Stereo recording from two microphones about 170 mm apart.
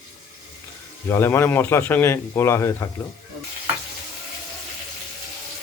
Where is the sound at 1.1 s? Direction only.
15° left (ahead or behind).